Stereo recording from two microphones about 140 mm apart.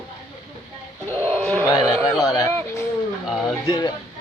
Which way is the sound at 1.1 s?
15° left (ahead or behind).